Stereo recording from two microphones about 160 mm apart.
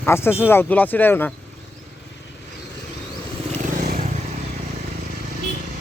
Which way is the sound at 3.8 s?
60° right (ahead or behind).